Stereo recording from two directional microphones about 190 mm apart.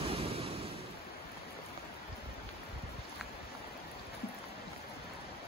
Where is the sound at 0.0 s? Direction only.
30° right (ahead or behind).